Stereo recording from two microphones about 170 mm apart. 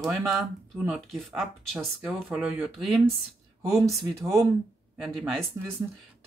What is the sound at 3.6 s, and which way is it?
Speech, 20° right (ahead or behind).